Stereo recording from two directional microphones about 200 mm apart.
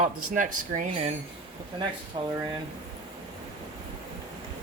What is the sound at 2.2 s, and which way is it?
Speech, 20° right (ahead or behind).